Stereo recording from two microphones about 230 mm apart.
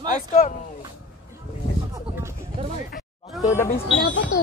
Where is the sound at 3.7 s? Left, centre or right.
Left.